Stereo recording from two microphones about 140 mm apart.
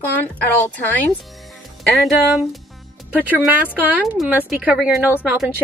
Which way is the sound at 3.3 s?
10° right (ahead or behind).